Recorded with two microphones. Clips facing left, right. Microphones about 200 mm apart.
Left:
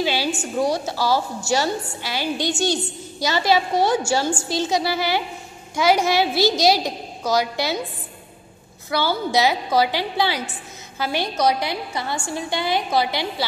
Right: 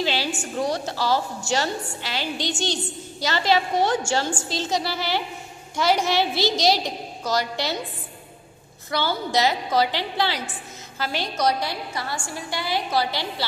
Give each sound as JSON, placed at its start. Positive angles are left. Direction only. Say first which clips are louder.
{"t": 0.0, "sound": "a woman's voice", "louder": "left 3 dB", "side_deg": 10}
{"t": 8.9, "sound": "a woman's voice", "louder": "left 3 dB", "side_deg": 10}